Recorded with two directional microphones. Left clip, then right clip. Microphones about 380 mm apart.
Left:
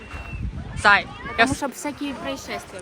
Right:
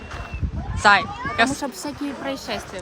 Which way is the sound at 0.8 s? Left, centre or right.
Centre.